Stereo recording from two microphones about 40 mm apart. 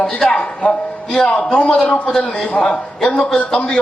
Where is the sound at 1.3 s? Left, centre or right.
Left.